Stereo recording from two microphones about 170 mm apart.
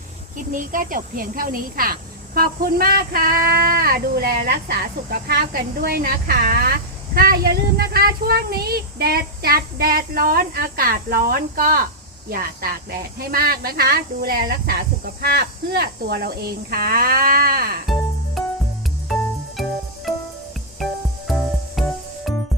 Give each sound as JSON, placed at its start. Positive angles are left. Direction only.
{"t": 0.3, "sound": "speech", "side_deg": -50}
{"t": 19.6, "sound": "music", "side_deg": 0}
{"t": 21.2, "sound": "music", "side_deg": 0}